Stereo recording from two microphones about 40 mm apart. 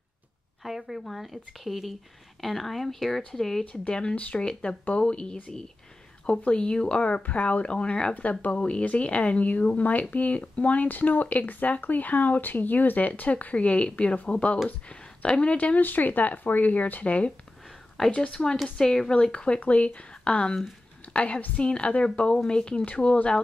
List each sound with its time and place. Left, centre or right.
0.7 s speech: centre
3.6 s speech: left
8.1 s speech: left
15.5 s speech: left
15.8 s speech: left
18.0 s speech: centre
19.6 s a woman's voice: left